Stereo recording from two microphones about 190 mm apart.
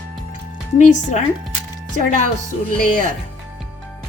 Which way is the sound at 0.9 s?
40° left (ahead or behind).